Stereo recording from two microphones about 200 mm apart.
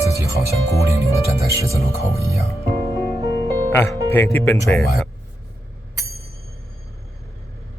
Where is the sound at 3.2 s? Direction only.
15° right (ahead or behind).